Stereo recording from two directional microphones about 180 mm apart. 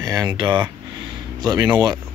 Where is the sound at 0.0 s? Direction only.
20° right (ahead or behind).